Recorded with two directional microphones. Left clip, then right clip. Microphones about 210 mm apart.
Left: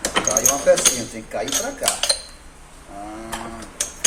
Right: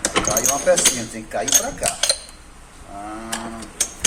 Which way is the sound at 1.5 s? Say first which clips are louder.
Right 3 dB; 20° right (ahead or behind).